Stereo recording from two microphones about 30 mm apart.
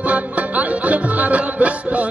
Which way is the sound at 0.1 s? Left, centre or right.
Right.